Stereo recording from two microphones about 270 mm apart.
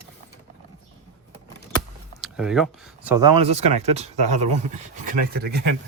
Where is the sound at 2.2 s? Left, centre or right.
Centre.